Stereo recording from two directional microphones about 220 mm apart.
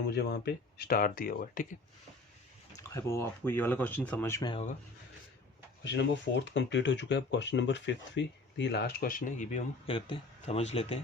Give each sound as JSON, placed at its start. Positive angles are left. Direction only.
{"t": 0.1, "sound": "speech", "side_deg": 50}
{"t": 2.7, "sound": "speech", "side_deg": 10}
{"t": 5.8, "sound": "speech", "side_deg": 55}